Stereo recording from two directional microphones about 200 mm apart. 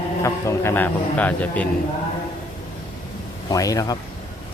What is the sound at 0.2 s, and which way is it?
Speech, 15° left (ahead or behind).